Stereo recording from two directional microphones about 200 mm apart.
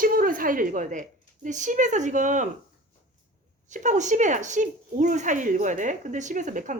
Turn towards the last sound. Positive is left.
turn(degrees=-40)  # may be behind; listen again after turning